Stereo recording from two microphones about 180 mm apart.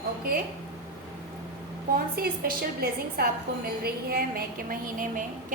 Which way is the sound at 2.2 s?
55° right (ahead or behind).